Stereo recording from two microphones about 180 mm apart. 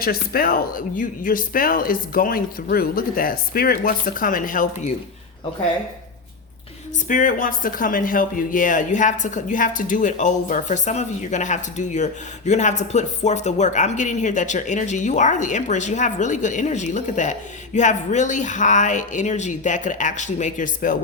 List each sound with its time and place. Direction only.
0.0 s speech: 55° left (ahead or behind)
7.1 s speech: 45° left (ahead or behind)